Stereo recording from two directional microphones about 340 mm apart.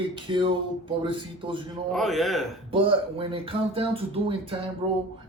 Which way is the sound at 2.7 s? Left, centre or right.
Centre.